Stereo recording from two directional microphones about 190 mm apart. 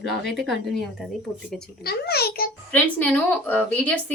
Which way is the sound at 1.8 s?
55° left (ahead or behind).